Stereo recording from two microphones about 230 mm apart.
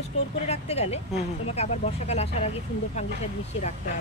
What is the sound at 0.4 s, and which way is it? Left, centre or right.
Speech, left.